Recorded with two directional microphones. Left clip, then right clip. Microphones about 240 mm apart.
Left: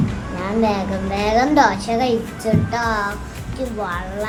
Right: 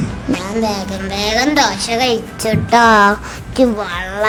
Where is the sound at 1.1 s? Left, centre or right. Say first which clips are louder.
Right 1 dB; right.